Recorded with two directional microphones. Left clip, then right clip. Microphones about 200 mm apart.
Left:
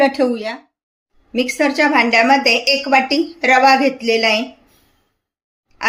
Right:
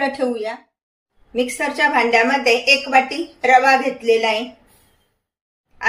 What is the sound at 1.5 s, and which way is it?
Speech, 45° left (ahead or behind).